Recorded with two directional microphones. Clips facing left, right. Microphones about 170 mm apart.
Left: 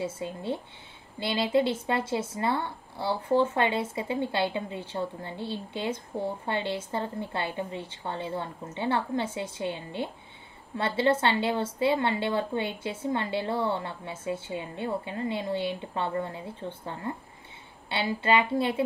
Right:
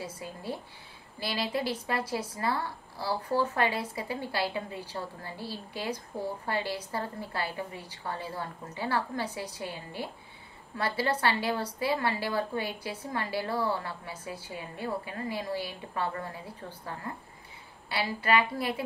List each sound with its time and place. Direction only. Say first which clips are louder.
0.0 s speech: left 6 dB; 25° left (ahead or behind)